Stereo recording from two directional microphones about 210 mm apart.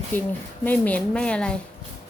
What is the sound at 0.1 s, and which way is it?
A woman's voice, 10° left (ahead or behind).